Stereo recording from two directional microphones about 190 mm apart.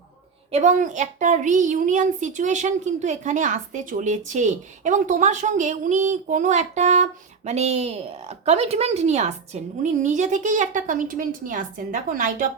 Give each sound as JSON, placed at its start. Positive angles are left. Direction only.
{"t": 0.5, "sound": "a woman's voice", "side_deg": -40}